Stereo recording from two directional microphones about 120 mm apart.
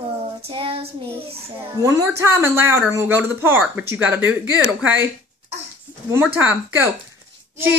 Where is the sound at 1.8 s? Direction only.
25° right (ahead or behind).